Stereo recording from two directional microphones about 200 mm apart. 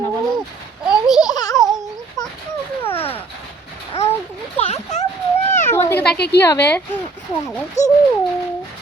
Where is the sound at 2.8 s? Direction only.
10° left (ahead or behind).